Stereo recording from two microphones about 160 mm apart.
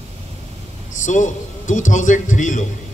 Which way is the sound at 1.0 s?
50° left (ahead or behind).